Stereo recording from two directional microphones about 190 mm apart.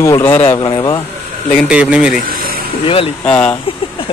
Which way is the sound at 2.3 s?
50° right (ahead or behind).